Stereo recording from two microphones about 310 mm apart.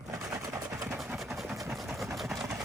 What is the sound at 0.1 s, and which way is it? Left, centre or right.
Vehicle, centre.